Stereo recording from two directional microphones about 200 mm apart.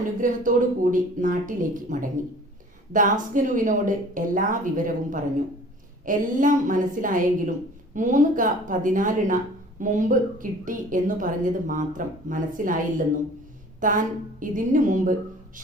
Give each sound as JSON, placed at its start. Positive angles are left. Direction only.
{"t": 0.2, "sound": "a woman's voice", "side_deg": -40}
{"t": 13.8, "sound": "a woman's voice", "side_deg": -40}